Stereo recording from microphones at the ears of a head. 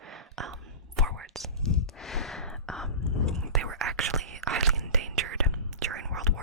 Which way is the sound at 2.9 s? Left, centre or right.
Left.